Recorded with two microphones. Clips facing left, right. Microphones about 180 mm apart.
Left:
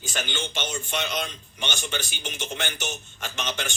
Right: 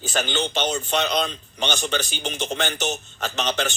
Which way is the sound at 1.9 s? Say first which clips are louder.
Right 6 dB; 45° right (ahead or behind).